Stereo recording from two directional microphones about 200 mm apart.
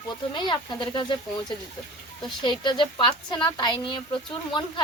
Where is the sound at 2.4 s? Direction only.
20° left (ahead or behind).